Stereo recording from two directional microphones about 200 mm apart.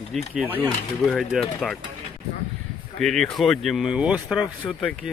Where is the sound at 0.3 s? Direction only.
5° right (ahead or behind).